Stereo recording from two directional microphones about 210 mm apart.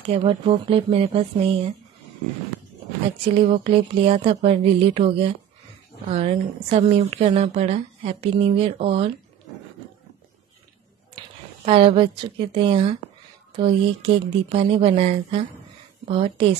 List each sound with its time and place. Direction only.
0.1 s a woman's voice: 25° right (ahead or behind)
3.3 s a woman's voice: 30° right (ahead or behind)
11.1 s a woman's voice: 25° right (ahead or behind)